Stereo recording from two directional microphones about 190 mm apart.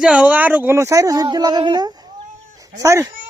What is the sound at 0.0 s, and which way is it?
Speech, 5° right (ahead or behind).